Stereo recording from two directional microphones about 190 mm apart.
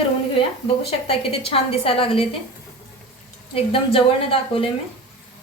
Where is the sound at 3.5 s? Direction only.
30° left (ahead or behind).